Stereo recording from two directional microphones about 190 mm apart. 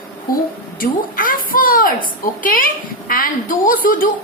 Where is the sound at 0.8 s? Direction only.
45° left (ahead or behind).